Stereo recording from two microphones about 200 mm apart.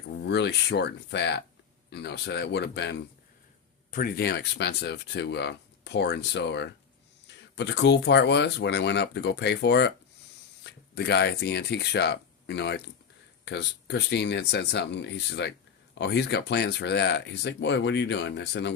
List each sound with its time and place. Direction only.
0.3 s speech: 55° left (ahead or behind)
3.9 s speech: 45° left (ahead or behind); by 18.7 s 60° left (ahead or behind)